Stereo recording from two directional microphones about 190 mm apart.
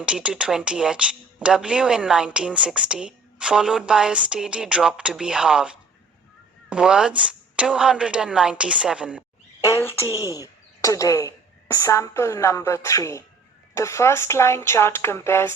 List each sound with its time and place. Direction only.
0.0 s speech: 5° right (ahead or behind)
9.6 s a sound: 15° left (ahead or behind)
10.8 s a woman's voice: 15° left (ahead or behind)